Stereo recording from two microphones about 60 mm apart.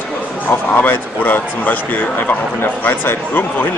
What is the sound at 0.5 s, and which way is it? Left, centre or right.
A man's voice, left.